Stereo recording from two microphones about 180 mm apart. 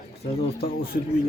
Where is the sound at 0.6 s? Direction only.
55° left (ahead or behind).